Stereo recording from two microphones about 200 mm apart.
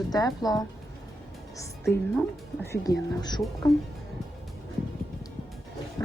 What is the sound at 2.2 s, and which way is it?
A woman's voice, 10° left (ahead or behind).